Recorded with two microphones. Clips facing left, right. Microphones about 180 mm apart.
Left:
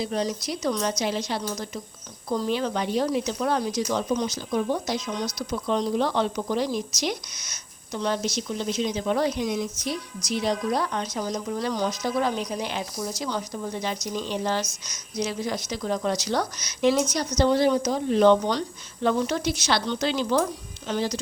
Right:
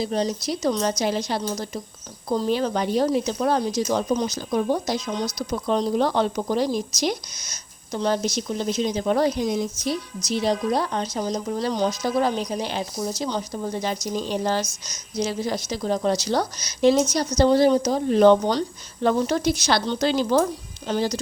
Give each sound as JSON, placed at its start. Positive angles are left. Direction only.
{"t": 0.0, "sound": "a woman's voice", "side_deg": -30}
{"t": 5.1, "sound": "speech", "side_deg": -10}
{"t": 5.4, "sound": "a woman's voice", "side_deg": -40}
{"t": 13.5, "sound": "a woman's voice", "side_deg": -35}
{"t": 18.1, "sound": "a woman's voice", "side_deg": -45}